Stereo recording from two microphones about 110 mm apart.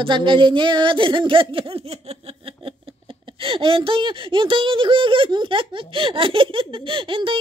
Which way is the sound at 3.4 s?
55° right (ahead or behind).